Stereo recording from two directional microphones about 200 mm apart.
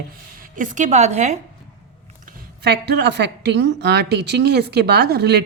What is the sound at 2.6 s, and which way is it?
A woman's voice, 55° right (ahead or behind).